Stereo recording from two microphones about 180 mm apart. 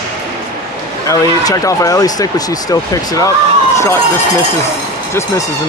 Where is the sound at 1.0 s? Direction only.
20° left (ahead or behind).